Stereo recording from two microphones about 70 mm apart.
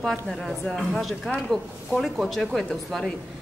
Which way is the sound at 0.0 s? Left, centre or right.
Centre.